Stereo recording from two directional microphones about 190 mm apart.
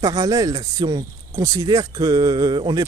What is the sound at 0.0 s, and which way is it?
Speech, 20° right (ahead or behind).